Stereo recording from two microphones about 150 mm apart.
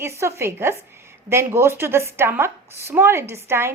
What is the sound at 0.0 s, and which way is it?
A woman's voice, 15° right (ahead or behind).